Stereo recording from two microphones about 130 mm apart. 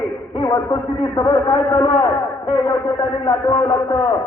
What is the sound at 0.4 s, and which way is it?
A man's voice, 35° left (ahead or behind).